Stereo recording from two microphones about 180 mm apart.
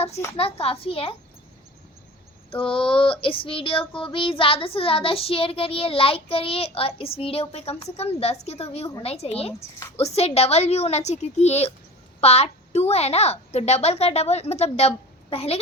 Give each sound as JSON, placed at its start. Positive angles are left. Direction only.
{"t": 0.3, "sound": "child singing", "side_deg": 35}
{"t": 2.5, "sound": "child singing", "side_deg": 30}